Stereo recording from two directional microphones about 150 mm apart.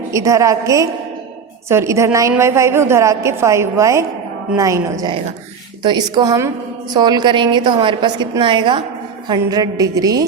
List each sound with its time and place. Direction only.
0.1 s a woman's voice: 20° right (ahead or behind)